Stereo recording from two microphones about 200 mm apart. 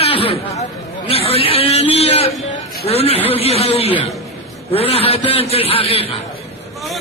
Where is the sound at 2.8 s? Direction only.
30° left (ahead or behind).